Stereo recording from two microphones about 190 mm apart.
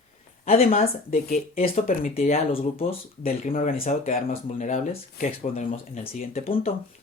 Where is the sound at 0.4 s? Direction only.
30° left (ahead or behind).